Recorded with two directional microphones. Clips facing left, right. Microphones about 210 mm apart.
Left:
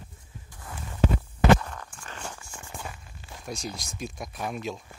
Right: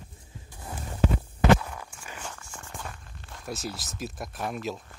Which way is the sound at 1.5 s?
10° right (ahead or behind).